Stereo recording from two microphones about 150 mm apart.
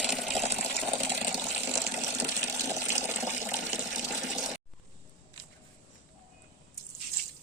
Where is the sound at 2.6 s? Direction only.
20° right (ahead or behind).